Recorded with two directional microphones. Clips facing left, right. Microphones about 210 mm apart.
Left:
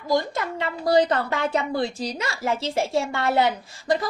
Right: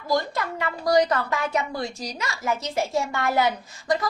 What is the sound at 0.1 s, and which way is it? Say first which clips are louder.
A woman's voice: left 1 dB; 25° left (ahead or behind).